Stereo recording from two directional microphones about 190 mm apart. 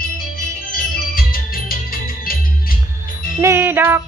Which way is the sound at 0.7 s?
50° left (ahead or behind).